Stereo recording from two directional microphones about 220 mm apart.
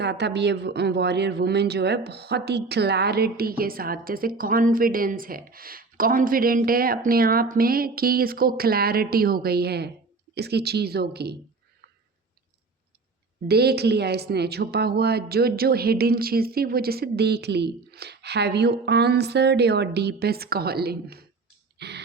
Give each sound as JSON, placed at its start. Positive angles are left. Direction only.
{"t": 0.0, "sound": "speech", "side_deg": -50}
{"t": 13.5, "sound": "speech", "side_deg": -45}
{"t": 21.8, "sound": "a sound", "side_deg": -50}